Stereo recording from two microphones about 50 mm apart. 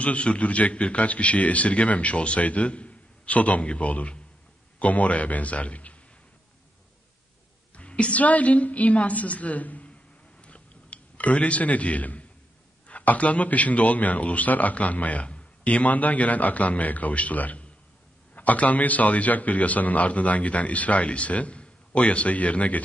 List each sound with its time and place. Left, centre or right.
0.0 s a man's voice: left
7.7 s a woman's voice: left
10.4 s chewing: left
12.8 s a man's voice: left